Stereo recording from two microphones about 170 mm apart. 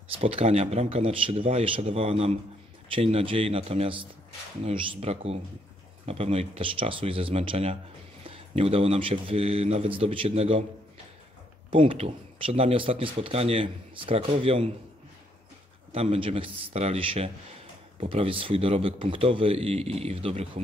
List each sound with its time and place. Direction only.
0.2 s speech: 35° right (ahead or behind)
11.7 s speech: 30° right (ahead or behind)
15.9 s speech: 35° right (ahead or behind)